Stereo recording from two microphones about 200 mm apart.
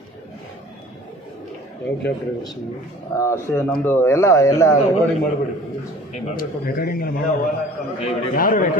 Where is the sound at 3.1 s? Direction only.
15° left (ahead or behind).